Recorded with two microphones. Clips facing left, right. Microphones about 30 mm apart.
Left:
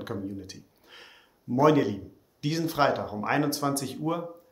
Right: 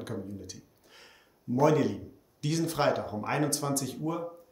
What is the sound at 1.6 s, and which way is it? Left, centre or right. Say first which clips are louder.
Speech: left 3 dB; left.